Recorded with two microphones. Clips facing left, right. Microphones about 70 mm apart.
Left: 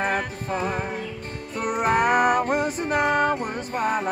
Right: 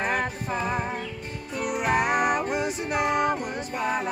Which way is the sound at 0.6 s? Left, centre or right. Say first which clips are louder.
Left 1 dB; left.